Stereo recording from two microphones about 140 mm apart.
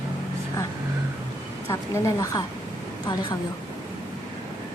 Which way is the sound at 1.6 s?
20° left (ahead or behind).